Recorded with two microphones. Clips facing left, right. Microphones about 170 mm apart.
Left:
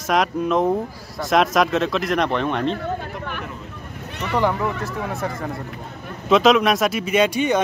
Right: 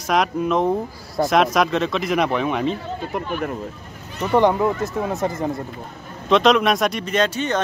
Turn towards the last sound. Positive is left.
turn(degrees=10)  # may be behind; listen again after turning